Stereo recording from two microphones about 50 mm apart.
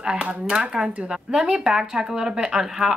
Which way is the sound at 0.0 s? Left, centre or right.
Centre.